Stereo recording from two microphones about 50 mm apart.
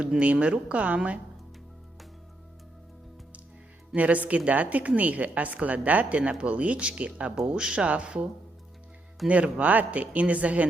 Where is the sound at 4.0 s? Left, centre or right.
Right.